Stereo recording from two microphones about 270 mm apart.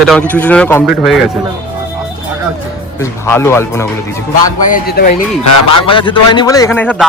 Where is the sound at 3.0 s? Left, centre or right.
Centre.